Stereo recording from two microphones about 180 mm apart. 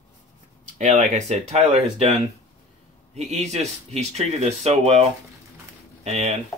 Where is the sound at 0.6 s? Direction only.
40° right (ahead or behind).